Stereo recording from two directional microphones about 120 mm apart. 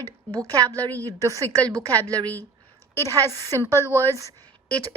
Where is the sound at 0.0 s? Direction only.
30° right (ahead or behind).